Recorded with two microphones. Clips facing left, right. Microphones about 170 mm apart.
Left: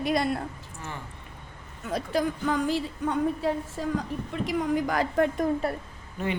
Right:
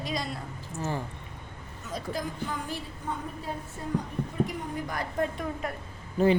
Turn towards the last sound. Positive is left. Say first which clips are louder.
# right 8 dB
turn(degrees=-30)  # may be behind; listen again after turning